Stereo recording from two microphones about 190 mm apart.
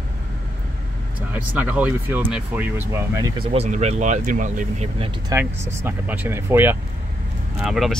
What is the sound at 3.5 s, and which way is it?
Speech, 35° right (ahead or behind).